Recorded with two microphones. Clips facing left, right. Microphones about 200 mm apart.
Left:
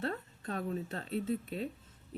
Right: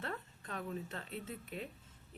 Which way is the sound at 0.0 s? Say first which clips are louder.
Left 7 dB; 35° left (ahead or behind).